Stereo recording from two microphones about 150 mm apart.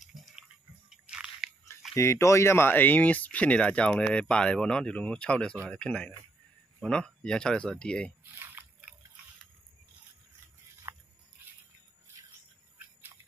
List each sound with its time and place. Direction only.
0.4 s biting: 5° right (ahead or behind)
2.0 s speech: 20° left (ahead or behind)
8.2 s a sound: 15° right (ahead or behind)
10.9 s biting: 20° right (ahead or behind)